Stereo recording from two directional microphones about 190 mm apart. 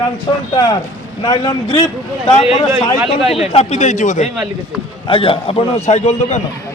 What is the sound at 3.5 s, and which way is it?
Speech, 35° left (ahead or behind).